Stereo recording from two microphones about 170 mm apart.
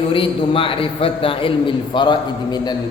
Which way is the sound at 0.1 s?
30° left (ahead or behind).